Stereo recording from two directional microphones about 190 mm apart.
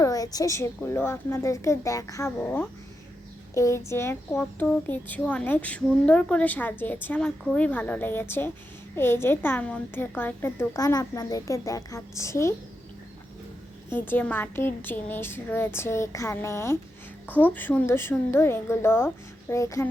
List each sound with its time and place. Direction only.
0.0 s speech: 20° left (ahead or behind)
13.9 s speech: 10° left (ahead or behind)